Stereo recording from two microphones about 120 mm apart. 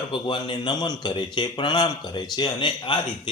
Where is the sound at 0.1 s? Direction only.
45° left (ahead or behind).